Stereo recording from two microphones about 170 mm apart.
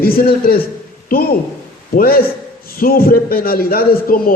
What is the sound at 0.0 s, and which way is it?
Speech, 60° left (ahead or behind).